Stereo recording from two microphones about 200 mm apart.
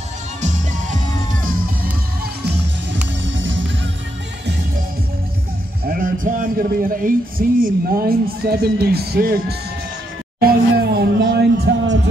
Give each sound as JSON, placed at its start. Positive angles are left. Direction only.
{"t": 3.3, "sound": "music", "side_deg": -70}
{"t": 5.9, "sound": "a man's voice", "side_deg": -45}
{"t": 10.4, "sound": "a sound", "side_deg": -50}